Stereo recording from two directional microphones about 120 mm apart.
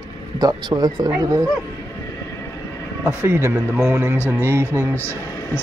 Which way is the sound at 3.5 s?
5° right (ahead or behind).